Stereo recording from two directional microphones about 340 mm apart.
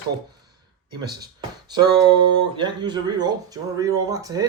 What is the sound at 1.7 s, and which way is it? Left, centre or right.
Speech, centre.